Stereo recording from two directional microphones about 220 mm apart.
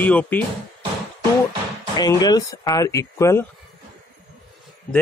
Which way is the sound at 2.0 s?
15° left (ahead or behind).